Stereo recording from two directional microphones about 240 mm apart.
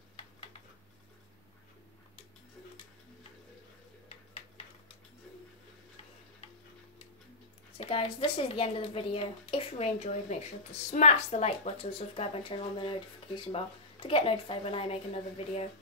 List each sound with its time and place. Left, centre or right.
7.7 s speech: left